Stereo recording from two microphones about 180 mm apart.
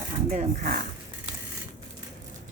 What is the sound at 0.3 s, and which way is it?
Speech, 45° right (ahead or behind).